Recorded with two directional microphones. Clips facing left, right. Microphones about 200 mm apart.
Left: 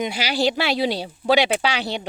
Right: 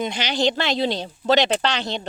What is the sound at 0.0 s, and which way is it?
Speech, 5° left (ahead or behind).